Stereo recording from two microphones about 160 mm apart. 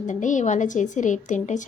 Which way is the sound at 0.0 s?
50° left (ahead or behind).